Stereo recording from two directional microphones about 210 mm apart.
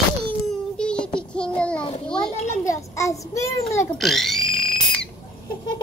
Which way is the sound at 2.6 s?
15° left (ahead or behind).